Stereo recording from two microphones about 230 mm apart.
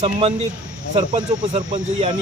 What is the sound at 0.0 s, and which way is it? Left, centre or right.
Speech, right.